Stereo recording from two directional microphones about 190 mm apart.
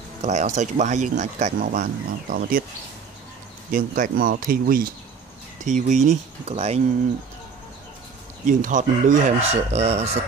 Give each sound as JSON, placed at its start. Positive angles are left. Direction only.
{"t": 0.2, "sound": "speech", "side_deg": -40}
{"t": 3.7, "sound": "speech", "side_deg": -45}
{"t": 8.5, "sound": "speech", "side_deg": -40}